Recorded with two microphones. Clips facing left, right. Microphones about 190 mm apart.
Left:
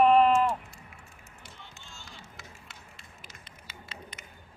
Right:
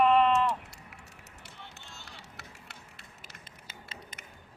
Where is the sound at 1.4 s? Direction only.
65° right (ahead or behind).